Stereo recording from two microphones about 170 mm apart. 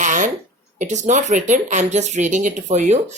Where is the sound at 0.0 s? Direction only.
45° right (ahead or behind).